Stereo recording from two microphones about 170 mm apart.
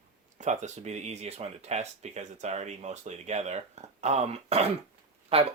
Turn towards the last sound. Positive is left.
turn(degrees=-35)  # may be behind; listen again after turning